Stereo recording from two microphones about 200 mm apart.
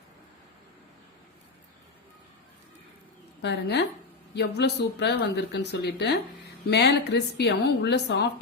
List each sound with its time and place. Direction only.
3.4 s speech: 55° left (ahead or behind)